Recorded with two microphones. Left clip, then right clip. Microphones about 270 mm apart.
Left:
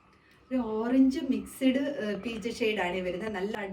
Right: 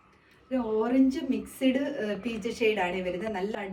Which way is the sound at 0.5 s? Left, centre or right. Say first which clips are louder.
Right 3 dB; centre.